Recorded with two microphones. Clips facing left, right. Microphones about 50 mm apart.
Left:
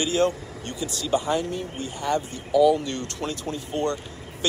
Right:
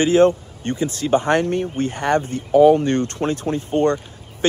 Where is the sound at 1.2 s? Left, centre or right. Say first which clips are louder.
Right 7 dB; right.